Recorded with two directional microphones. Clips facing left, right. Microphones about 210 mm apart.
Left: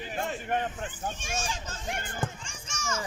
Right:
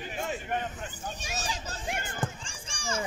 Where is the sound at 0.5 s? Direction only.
45° left (ahead or behind).